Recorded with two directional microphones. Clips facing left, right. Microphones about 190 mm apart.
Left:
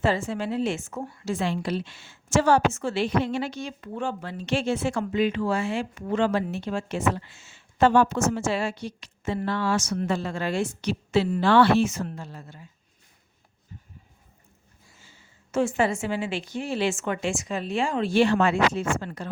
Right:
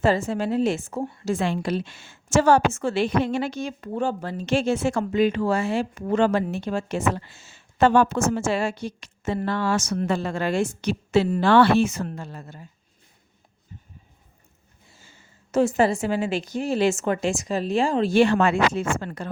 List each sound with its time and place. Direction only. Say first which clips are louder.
0.0 s a woman's voice: right 4 dB; 40° right (ahead or behind)
1.2 s a woman's voice: right 2 dB; 50° right (ahead or behind)
7.8 s a woman's voice: right 1 dB; 55° right (ahead or behind)
15.5 s a woman's voice: right 4 dB; 40° right (ahead or behind); by 19.3 s 55° right (ahead or behind)